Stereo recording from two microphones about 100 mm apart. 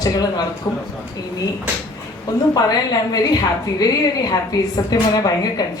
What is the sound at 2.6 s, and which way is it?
A man's voice, 40° left (ahead or behind).